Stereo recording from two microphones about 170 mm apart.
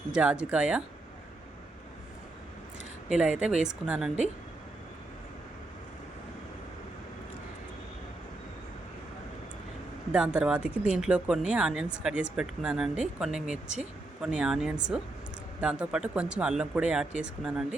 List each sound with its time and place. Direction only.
0.1 s speech: 5° right (ahead or behind)
3.1 s speech: 5° right (ahead or behind)
10.1 s speech: 5° right (ahead or behind)